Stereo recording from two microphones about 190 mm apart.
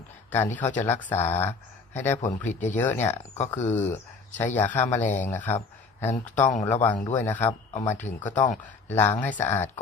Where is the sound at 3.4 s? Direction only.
10° left (ahead or behind).